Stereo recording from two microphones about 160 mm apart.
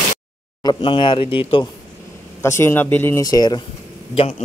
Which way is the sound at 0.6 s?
30° left (ahead or behind).